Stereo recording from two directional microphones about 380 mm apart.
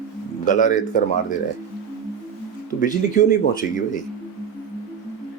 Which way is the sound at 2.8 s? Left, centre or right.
Left.